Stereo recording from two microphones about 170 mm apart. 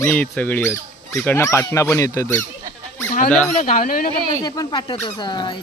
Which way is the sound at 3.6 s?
50° left (ahead or behind).